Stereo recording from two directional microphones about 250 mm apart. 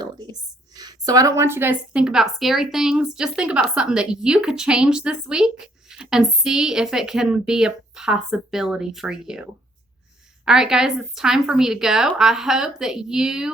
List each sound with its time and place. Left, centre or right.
0.0 s a sound: centre
0.8 s a woman's voice: centre
10.4 s a woman's voice: centre